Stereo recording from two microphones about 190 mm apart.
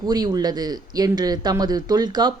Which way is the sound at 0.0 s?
20° right (ahead or behind).